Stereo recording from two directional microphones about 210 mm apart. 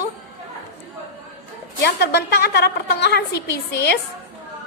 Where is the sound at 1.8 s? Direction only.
50° left (ahead or behind).